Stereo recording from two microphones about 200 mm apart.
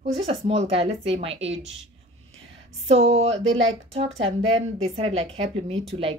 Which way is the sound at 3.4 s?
70° right (ahead or behind).